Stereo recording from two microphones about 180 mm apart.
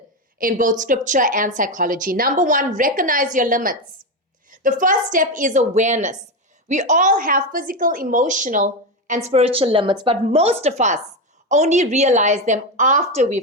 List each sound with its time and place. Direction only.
0.3 s a woman's voice: 50° right (ahead or behind)